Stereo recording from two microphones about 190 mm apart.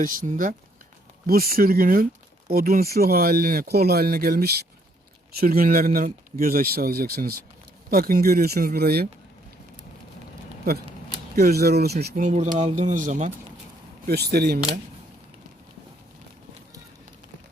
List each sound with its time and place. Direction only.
0.0 s speech: 45° right (ahead or behind)
11.3 s speech: 55° right (ahead or behind); by 13.3 s 40° right (ahead or behind)
14.1 s speech: 55° right (ahead or behind)